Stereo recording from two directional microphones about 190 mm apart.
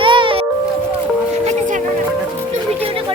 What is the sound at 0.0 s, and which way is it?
Music, 25° right (ahead or behind).